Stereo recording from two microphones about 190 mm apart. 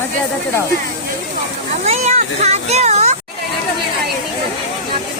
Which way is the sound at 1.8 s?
35° right (ahead or behind).